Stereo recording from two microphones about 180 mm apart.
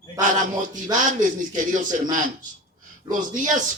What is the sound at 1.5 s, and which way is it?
Speech, 45° right (ahead or behind).